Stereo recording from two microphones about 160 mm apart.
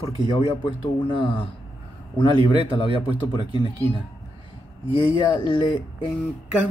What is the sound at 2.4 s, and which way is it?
Speech, 30° left (ahead or behind).